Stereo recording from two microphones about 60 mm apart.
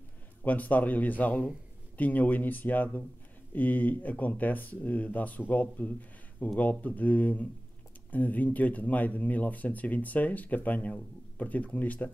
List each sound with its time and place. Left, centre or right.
0.4 s speech: left